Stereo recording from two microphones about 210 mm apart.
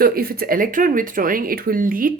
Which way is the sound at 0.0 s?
45° right (ahead or behind).